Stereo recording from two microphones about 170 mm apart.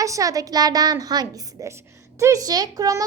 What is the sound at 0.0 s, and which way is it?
A woman's voice, 20° right (ahead or behind).